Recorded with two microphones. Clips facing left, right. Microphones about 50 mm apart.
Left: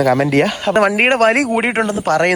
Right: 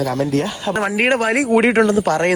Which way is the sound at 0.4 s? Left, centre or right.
Left.